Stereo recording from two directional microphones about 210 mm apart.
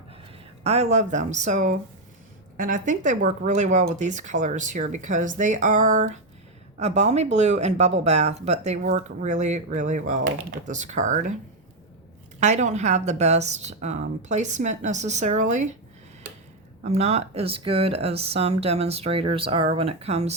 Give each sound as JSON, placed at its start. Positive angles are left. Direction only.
{"t": 0.6, "sound": "speech", "side_deg": -30}
{"t": 12.4, "sound": "speech", "side_deg": -35}
{"t": 16.8, "sound": "speech", "side_deg": -30}